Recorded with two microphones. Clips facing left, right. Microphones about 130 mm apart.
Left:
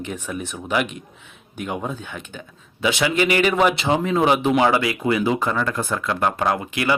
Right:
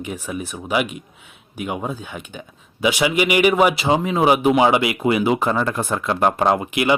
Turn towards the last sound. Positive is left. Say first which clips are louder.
# right 3 dB
turn(degrees=-20)  # may be behind; listen again after turning